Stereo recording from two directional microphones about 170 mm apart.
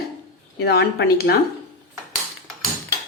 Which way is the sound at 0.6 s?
70° left (ahead or behind).